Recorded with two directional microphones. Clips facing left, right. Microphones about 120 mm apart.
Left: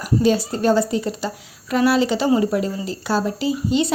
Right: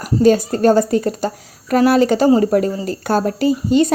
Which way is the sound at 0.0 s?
45° right (ahead or behind).